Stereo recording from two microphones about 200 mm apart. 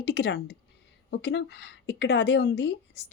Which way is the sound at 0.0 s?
55° left (ahead or behind).